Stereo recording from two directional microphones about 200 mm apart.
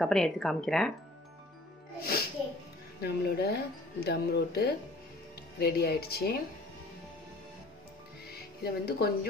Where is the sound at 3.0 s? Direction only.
55° left (ahead or behind).